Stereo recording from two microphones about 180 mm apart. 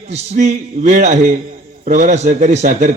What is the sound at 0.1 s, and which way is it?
A man's voice, 40° right (ahead or behind).